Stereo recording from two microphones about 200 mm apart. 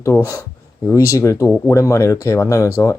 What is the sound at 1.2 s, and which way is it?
Speech, 15° left (ahead or behind).